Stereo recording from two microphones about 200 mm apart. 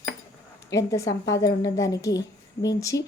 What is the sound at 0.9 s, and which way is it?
A woman's voice, 15° left (ahead or behind).